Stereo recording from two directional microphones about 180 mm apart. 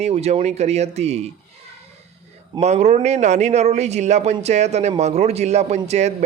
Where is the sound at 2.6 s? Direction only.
40° right (ahead or behind).